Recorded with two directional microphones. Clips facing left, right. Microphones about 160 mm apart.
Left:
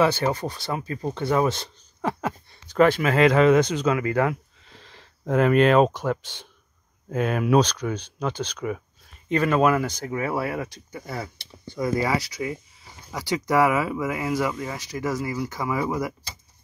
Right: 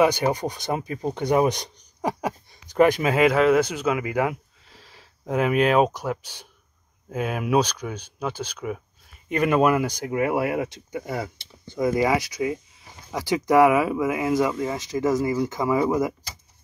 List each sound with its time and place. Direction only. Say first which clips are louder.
0.0 s speech: right 1 dB; 15° right (ahead or behind)